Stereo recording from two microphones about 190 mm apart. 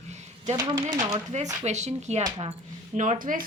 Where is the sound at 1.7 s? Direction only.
35° right (ahead or behind).